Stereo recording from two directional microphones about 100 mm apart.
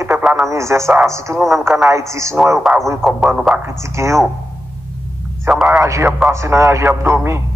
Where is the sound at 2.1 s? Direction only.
30° right (ahead or behind).